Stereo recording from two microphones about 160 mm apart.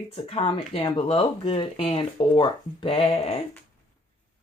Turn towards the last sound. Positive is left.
turn(degrees=40)  # may be behind; listen again after turning